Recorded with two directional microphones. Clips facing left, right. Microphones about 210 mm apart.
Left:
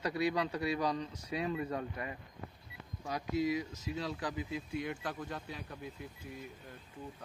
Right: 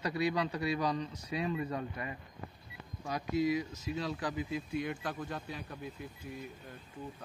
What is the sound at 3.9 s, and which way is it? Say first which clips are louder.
Speech: right 2 dB; 30° left (ahead or behind).